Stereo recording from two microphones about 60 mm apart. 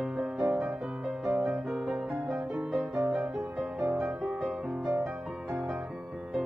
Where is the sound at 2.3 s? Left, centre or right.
Centre.